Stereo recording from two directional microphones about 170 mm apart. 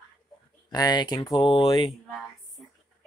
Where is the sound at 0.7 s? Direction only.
25° left (ahead or behind).